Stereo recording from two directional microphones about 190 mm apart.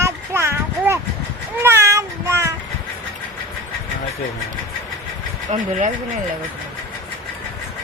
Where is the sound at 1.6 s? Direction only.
15° right (ahead or behind).